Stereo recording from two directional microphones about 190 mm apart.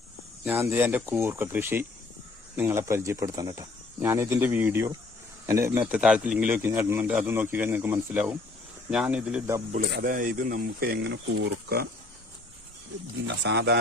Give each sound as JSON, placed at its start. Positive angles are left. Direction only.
{"t": 0.4, "sound": "a man's voice", "side_deg": -10}
{"t": 9.9, "sound": "speech", "side_deg": -50}
{"t": 13.2, "sound": "speech", "side_deg": -65}